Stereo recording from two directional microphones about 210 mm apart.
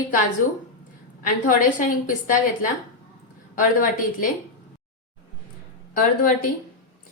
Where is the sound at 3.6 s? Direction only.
40° left (ahead or behind).